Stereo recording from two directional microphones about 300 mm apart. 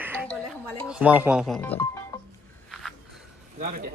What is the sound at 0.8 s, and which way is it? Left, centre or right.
Speech, centre.